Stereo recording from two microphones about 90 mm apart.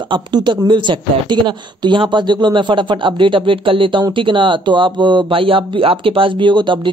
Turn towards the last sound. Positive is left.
turn(degrees=-60)  # may be behind; listen again after turning